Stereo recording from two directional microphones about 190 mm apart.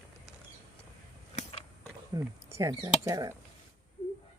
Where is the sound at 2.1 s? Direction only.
20° right (ahead or behind).